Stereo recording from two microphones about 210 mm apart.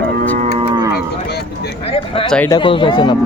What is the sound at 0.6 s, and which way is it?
Cattle, 20° right (ahead or behind).